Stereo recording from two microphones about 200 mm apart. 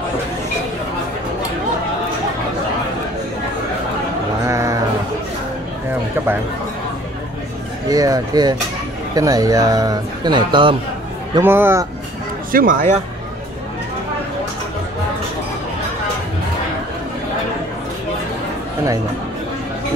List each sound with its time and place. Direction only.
4.5 s a sound: 15° right (ahead or behind)
7.9 s speech: 15° right (ahead or behind)
11.3 s speech: 10° right (ahead or behind)
12.5 s speech: 45° right (ahead or behind)